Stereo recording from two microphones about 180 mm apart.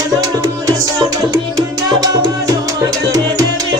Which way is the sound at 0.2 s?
20° right (ahead or behind).